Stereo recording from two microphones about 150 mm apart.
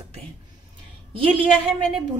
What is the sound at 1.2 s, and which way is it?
Speech, 35° right (ahead or behind).